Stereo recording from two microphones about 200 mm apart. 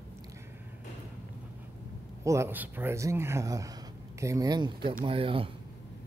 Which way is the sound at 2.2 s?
15° right (ahead or behind).